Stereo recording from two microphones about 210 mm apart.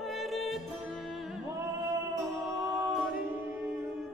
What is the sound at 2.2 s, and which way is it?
Music, 5° right (ahead or behind).